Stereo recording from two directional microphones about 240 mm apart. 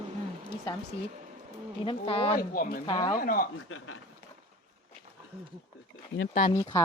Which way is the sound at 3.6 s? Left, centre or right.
Left.